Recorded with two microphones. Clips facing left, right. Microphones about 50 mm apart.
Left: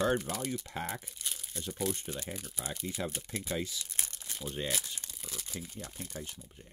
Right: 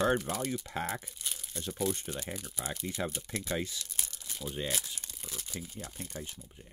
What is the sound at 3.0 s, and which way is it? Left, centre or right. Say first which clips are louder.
Speech: right 3 dB; right.